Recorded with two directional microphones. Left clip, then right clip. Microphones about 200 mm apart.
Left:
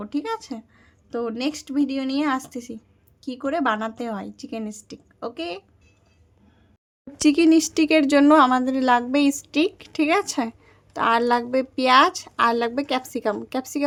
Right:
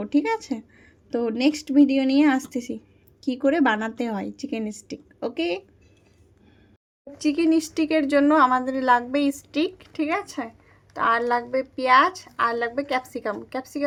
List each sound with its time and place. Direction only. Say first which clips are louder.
0.0 s speech: right 4 dB; centre (ahead or behind)
7.2 s speech: left 4 dB; 40° left (ahead or behind)